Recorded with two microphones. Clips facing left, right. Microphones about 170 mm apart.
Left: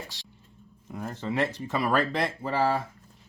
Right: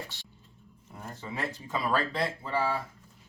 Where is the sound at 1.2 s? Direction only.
80° left.